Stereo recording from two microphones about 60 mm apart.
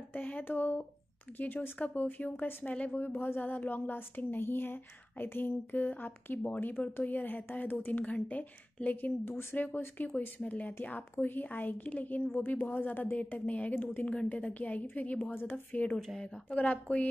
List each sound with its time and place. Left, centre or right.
0.1 s speech: left
2.6 s speech: left
15.7 s speech: left